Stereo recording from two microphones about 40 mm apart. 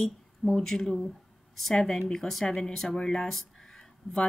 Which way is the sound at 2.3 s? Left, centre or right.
Centre.